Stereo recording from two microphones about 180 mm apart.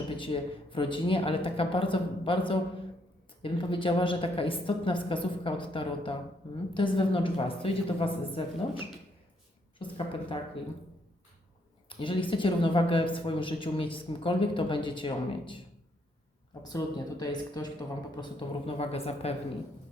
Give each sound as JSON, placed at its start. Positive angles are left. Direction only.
{"t": 0.2, "sound": "speech", "side_deg": 30}
{"t": 11.9, "sound": "speech", "side_deg": 30}
{"t": 16.6, "sound": "speech", "side_deg": 20}